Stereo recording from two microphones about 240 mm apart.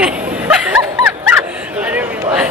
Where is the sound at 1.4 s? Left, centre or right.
Centre.